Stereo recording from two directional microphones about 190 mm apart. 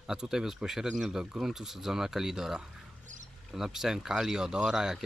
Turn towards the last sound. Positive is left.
turn(degrees=-5)  # may be behind; listen again after turning